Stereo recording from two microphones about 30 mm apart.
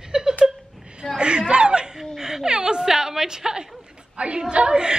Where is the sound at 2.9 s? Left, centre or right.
Centre.